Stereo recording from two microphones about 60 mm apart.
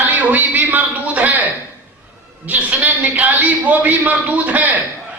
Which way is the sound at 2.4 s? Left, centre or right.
Right.